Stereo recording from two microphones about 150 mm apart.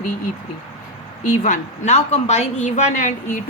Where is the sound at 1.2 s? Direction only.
55° left (ahead or behind).